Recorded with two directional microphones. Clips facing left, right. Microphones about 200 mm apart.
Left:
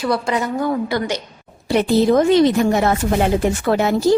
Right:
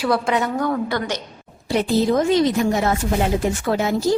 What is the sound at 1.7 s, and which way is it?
A woman's voice, 65° left (ahead or behind).